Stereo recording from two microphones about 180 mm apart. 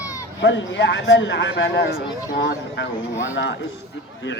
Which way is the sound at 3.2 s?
85° left.